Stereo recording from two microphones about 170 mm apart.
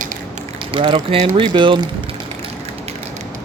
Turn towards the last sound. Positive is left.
turn(degrees=-30)  # may be behind; listen again after turning